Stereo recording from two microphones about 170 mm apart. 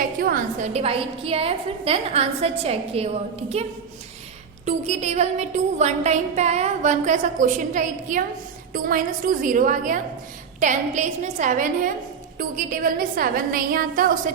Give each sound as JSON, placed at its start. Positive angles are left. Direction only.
{"t": 0.2, "sound": "a woman's voice", "side_deg": -55}